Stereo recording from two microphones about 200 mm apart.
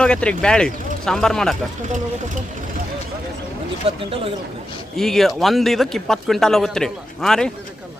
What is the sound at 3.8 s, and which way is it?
Speech, 30° right (ahead or behind).